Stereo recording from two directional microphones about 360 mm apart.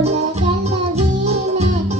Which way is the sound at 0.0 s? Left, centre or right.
Centre.